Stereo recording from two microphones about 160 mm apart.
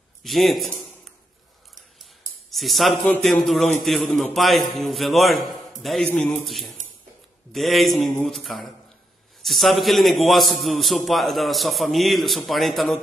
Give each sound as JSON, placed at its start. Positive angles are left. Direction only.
{"t": 0.2, "sound": "a man's voice", "side_deg": 0}
{"t": 2.5, "sound": "a man's voice", "side_deg": 0}